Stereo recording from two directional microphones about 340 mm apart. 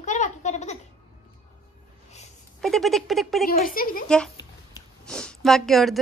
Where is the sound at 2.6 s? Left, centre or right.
Centre.